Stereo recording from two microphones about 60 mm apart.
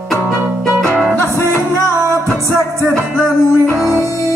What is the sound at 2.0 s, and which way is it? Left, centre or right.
Music, right.